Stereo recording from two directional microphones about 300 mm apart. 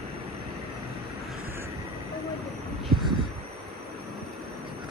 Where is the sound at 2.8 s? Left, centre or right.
Centre.